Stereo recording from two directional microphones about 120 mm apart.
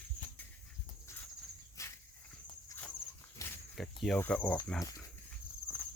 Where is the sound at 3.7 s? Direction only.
5° left (ahead or behind).